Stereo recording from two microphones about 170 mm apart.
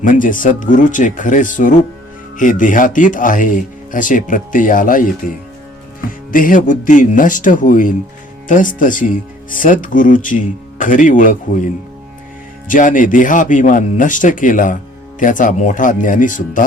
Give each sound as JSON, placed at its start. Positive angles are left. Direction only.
{"t": 0.0, "sound": "speech", "side_deg": 50}